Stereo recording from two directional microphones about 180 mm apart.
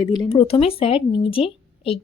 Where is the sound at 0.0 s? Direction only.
25° left (ahead or behind).